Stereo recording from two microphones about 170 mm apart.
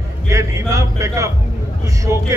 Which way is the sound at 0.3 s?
20° right (ahead or behind).